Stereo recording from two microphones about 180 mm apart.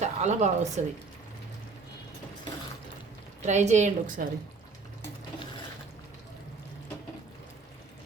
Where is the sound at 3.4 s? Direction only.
40° right (ahead or behind).